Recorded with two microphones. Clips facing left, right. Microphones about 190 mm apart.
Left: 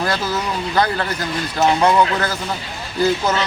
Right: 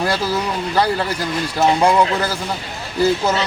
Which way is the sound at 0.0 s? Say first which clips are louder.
Right 2 dB; 10° right (ahead or behind).